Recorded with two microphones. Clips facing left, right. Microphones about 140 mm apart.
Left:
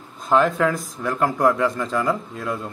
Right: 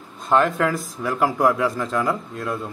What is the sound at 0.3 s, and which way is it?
Speech, centre (ahead or behind).